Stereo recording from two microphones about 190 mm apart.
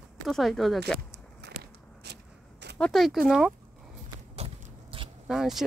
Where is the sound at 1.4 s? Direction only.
60° right (ahead or behind).